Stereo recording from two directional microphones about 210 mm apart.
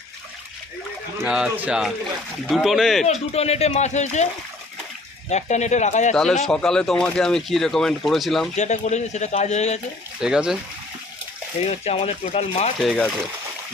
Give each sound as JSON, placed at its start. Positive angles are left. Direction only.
{"t": 1.2, "sound": "speech", "side_deg": -5}
{"t": 3.1, "sound": "speech", "side_deg": 30}
{"t": 5.3, "sound": "speech", "side_deg": 35}
{"t": 6.1, "sound": "speech", "side_deg": 0}
{"t": 8.5, "sound": "speech", "side_deg": 35}
{"t": 10.2, "sound": "speech", "side_deg": -5}
{"t": 11.6, "sound": "speech", "side_deg": 30}